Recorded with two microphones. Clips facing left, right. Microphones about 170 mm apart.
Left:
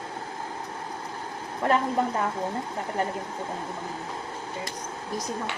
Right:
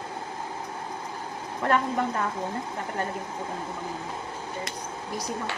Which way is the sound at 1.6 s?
25° left (ahead or behind).